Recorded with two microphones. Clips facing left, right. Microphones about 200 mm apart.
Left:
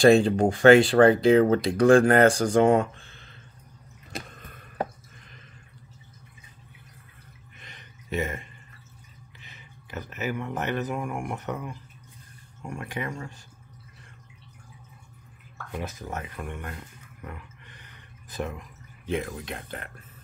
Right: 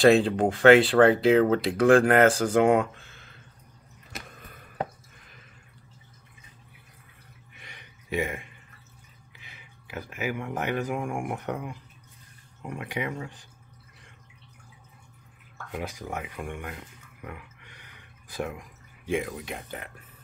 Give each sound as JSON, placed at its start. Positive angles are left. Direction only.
{"t": 0.0, "sound": "speech", "side_deg": 0}
{"t": 7.5, "sound": "a sound", "side_deg": -10}
{"t": 9.4, "sound": "speech", "side_deg": -10}
{"t": 15.7, "sound": "speech", "side_deg": -15}